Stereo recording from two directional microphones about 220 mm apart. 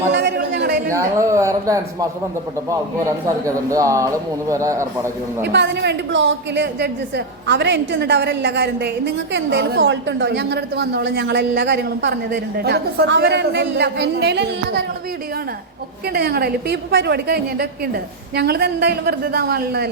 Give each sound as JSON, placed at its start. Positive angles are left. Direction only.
{"t": 0.1, "sound": "chatter", "side_deg": -50}
{"t": 0.9, "sound": "speech", "side_deg": -15}
{"t": 3.2, "sound": "speech", "side_deg": -15}
{"t": 5.5, "sound": "a woman's voice", "side_deg": -50}
{"t": 16.0, "sound": "a woman's voice", "side_deg": -45}